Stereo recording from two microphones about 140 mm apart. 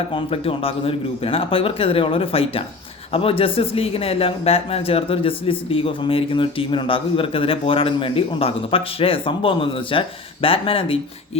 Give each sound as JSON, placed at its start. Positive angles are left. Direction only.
{"t": 0.1, "sound": "a man's voice", "side_deg": 45}